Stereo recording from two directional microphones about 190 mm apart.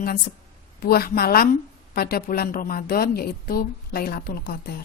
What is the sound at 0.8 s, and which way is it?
A woman's voice, 55° left (ahead or behind).